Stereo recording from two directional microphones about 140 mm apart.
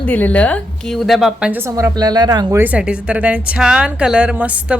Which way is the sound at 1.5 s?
20° right (ahead or behind).